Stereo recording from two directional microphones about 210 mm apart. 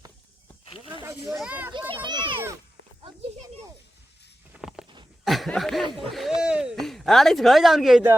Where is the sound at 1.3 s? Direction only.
5° right (ahead or behind).